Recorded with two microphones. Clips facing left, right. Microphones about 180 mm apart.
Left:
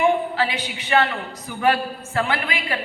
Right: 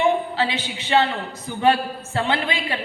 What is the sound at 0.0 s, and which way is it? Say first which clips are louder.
A woman's voice: even; 25° right (ahead or behind).